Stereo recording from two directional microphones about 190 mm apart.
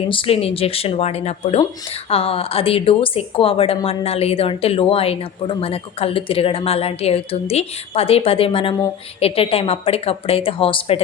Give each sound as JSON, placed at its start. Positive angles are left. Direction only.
{"t": 0.1, "sound": "a woman's voice", "side_deg": 30}